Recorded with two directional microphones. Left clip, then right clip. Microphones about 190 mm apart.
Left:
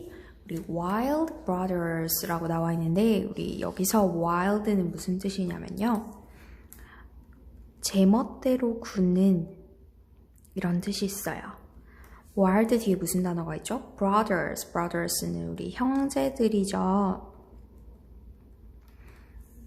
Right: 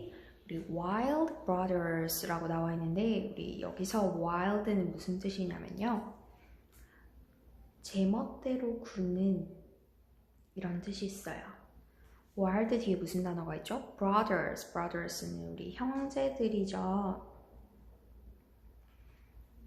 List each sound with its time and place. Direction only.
0.4 s speech: 15° left (ahead or behind)
7.8 s a woman's voice: 25° left (ahead or behind)
10.5 s a woman's voice: 20° left (ahead or behind)
12.4 s a woman's voice: 20° left (ahead or behind)